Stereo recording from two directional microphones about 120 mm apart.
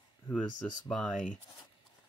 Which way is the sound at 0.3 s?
10° left (ahead or behind).